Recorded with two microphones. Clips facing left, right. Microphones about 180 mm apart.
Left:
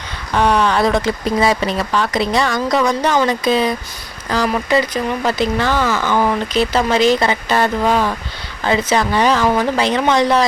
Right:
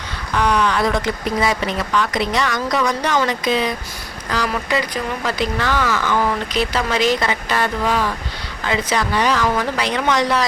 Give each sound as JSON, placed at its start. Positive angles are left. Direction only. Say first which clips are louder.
{"t": 0.3, "sound": "speech", "louder": "left 3 dB", "side_deg": 25}